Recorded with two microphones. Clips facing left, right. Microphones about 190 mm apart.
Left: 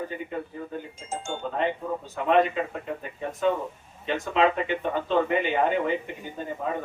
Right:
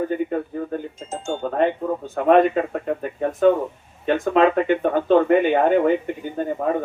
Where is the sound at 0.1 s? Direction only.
50° right (ahead or behind).